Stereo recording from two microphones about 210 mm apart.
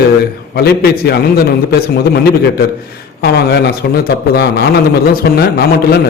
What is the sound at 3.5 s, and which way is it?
A man's voice, 50° left (ahead or behind).